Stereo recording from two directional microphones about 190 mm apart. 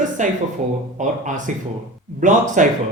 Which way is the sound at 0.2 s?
40° right (ahead or behind).